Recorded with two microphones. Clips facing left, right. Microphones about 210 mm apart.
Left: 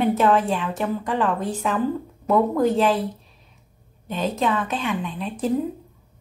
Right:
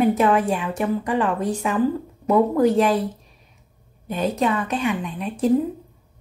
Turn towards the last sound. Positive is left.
turn(degrees=-10)  # may be behind; listen again after turning